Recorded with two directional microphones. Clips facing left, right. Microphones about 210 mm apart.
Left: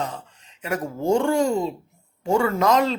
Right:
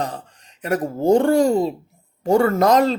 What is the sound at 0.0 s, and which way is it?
Speech, 35° right (ahead or behind).